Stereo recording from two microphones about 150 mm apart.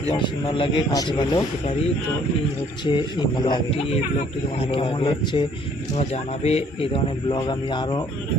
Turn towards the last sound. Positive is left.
turn(degrees=30)  # may be behind; listen again after turning